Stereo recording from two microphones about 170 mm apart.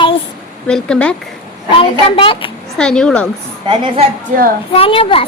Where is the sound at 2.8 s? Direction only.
5° left (ahead or behind).